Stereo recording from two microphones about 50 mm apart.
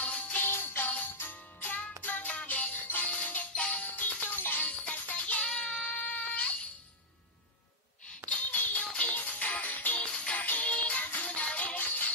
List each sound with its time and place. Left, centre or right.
0.0 s jingle bell: left
0.4 s jingle bell: left
1.3 s music: left
5.6 s a sound: centre
5.9 s a sound: left
8.3 s music: left
10.1 s music: left
10.4 s music: left